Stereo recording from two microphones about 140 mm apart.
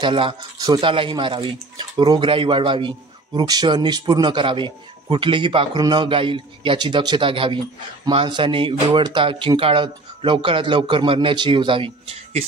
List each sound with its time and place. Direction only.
0.0 s a man's voice: 40° right (ahead or behind)